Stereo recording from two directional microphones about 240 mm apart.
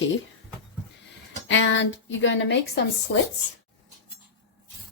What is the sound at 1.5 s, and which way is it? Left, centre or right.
Speech, left.